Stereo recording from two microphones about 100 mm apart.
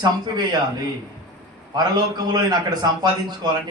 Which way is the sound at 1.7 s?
45° right (ahead or behind).